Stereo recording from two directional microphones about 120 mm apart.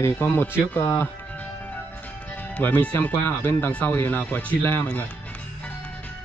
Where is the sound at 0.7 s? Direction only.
20° left (ahead or behind).